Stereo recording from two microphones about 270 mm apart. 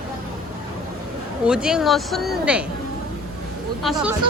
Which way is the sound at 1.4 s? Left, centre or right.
Centre.